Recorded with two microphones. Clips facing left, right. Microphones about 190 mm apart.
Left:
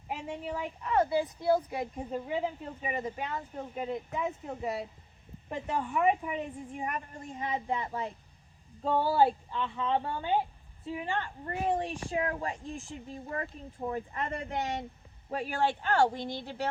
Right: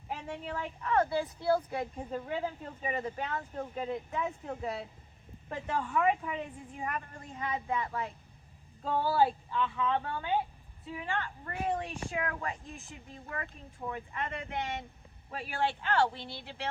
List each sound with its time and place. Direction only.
0.4 s speech: 10° left (ahead or behind)
5.5 s a woman's voice: 15° left (ahead or behind); by 16.6 s 40° left (ahead or behind)